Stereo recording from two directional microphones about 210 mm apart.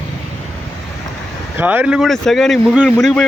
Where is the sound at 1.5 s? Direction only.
10° right (ahead or behind).